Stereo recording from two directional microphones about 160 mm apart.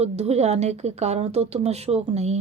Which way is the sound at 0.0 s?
40° right (ahead or behind).